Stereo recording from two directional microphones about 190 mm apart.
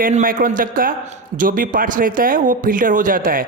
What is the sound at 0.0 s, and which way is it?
A man's voice, 45° right (ahead or behind).